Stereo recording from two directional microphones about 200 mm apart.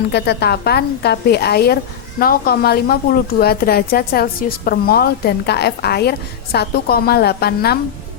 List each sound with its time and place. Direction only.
0.1 s a woman's voice: 55° left (ahead or behind)